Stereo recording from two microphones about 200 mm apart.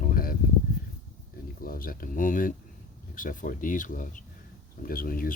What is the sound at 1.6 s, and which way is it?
Speech, 45° left (ahead or behind).